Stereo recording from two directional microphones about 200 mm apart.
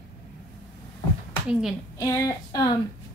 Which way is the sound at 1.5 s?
5° right (ahead or behind).